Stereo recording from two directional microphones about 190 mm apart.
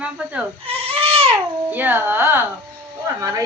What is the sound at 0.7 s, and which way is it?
Goat, 30° right (ahead or behind).